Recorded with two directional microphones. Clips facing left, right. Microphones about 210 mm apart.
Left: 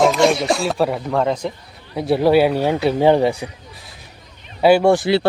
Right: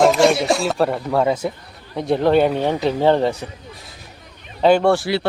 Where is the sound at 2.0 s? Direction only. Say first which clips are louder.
Left 1 dB; 5° left (ahead or behind).